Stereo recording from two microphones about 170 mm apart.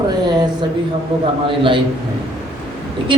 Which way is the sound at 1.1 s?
30° right (ahead or behind).